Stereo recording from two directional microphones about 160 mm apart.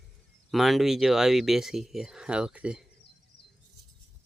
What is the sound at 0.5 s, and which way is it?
Speech, centre (ahead or behind).